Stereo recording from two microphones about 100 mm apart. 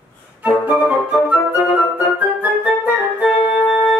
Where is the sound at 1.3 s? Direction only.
15° right (ahead or behind).